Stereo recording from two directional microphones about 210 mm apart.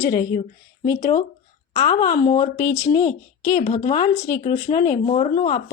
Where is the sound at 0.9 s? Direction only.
15° left (ahead or behind).